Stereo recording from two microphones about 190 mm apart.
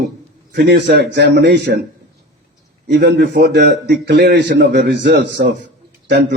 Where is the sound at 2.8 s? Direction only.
60° right (ahead or behind).